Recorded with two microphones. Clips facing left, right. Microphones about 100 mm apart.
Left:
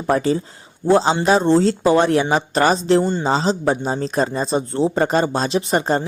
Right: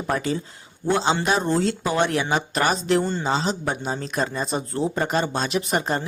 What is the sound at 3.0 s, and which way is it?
Speech, 15° left (ahead or behind).